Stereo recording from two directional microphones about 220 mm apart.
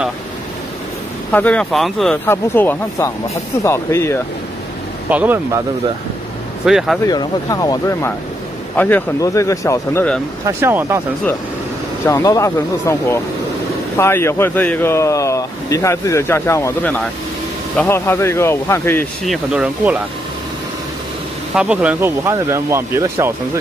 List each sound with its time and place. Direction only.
1.3 s speech: 5° left (ahead or behind)
5.1 s speech: 10° right (ahead or behind)
6.6 s speech: centre (ahead or behind)
7.1 s speech: 15° left (ahead or behind)
10.4 s speech: 10° right (ahead or behind)
12.1 s speech: 15° left (ahead or behind)
19.2 s speech: centre (ahead or behind)
21.5 s speech: 5° right (ahead or behind)